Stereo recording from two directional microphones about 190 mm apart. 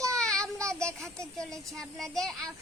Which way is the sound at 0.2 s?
5° left (ahead or behind).